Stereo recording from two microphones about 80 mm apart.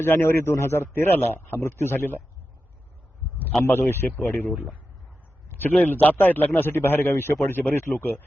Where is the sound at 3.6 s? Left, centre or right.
Left.